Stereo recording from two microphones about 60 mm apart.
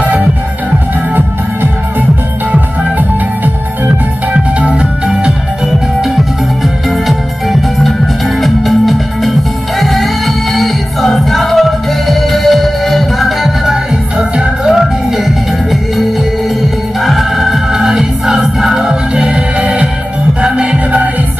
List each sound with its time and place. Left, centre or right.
0.7 s music: right; by 5.3 s centre
5.7 s music: centre
14.1 s music: centre
14.7 s music: centre